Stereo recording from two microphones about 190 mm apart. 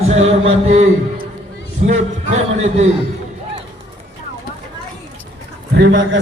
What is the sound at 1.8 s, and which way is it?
A man's voice, 35° right (ahead or behind).